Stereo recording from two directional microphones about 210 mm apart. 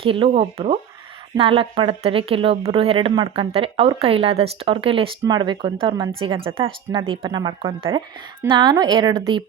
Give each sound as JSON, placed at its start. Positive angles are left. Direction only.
{"t": 0.0, "sound": "a woman's voice", "side_deg": -25}